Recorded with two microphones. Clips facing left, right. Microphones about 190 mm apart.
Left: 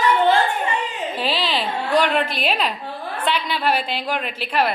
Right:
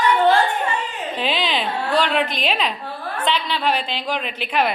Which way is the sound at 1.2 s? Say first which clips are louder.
Right 1 dB; 5° left (ahead or behind).